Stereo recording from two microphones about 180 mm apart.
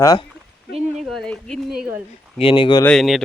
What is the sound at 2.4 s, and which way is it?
Speech, 30° left (ahead or behind).